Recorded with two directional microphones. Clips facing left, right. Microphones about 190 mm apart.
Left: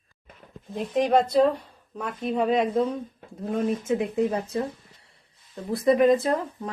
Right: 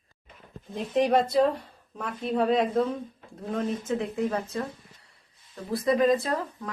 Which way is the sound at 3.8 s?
15° left (ahead or behind).